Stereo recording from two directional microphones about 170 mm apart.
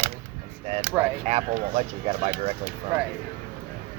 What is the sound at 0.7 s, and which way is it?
Speech, 40° right (ahead or behind).